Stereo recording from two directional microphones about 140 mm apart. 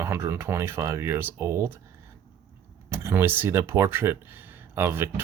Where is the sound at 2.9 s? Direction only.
15° right (ahead or behind).